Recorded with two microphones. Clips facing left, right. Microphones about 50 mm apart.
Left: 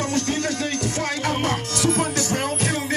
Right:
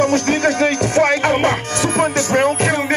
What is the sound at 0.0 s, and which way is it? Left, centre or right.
Music, right.